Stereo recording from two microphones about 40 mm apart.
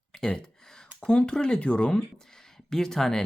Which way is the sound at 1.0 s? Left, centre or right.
Centre.